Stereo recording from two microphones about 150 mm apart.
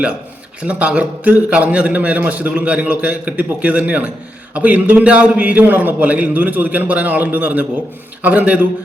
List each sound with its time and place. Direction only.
0.6 s a man's voice: 10° right (ahead or behind)